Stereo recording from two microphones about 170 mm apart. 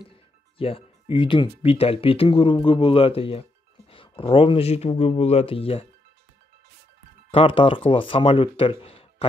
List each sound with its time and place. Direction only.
0.0 s music: 30° left (ahead or behind)
1.6 s speech: 35° left (ahead or behind)
7.2 s speech: 30° left (ahead or behind)